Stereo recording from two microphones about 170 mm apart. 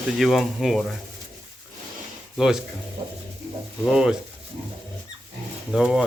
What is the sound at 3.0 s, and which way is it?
Music, 30° right (ahead or behind).